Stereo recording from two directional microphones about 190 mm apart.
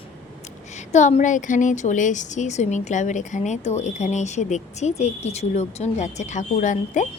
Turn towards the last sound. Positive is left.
turn(degrees=40)  # may be behind; listen again after turning